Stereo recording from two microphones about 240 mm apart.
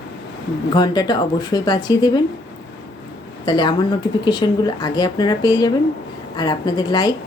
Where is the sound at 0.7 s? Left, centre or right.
Centre.